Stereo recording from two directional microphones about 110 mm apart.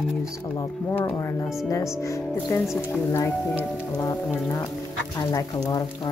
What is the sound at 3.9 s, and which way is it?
Speech, 30° left (ahead or behind).